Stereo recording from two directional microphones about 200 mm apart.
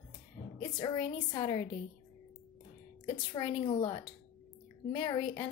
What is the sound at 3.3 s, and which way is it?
A woman's voice, 25° left (ahead or behind).